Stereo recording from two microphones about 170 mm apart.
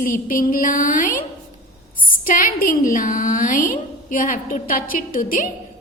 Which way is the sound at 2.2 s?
55° left (ahead or behind).